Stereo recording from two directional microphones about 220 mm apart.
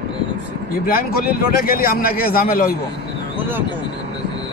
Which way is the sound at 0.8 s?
40° left (ahead or behind).